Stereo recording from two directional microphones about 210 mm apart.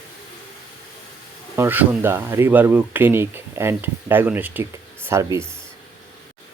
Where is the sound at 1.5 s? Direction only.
10° right (ahead or behind).